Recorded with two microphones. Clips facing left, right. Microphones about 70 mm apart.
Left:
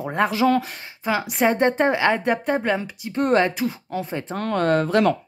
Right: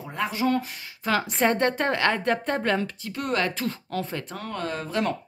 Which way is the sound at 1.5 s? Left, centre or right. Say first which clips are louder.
Left 5 dB; left.